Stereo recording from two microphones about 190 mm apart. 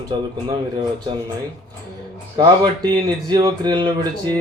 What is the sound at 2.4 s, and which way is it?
Speech, 20° right (ahead or behind).